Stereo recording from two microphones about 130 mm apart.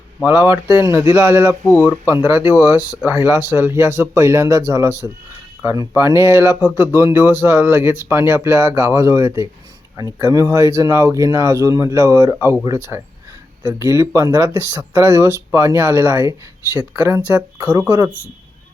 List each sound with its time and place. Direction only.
0.3 s speech: 15° right (ahead or behind)